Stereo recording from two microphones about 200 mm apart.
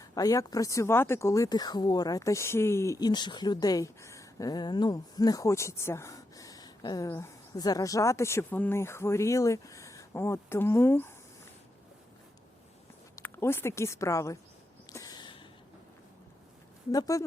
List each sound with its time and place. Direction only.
0.0 s speech: 20° left (ahead or behind)
13.1 s speech: 10° left (ahead or behind)
14.8 s a sound: 20° left (ahead or behind)
16.9 s speech: 15° left (ahead or behind)